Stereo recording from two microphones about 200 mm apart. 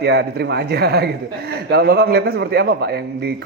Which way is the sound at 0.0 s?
55° right (ahead or behind).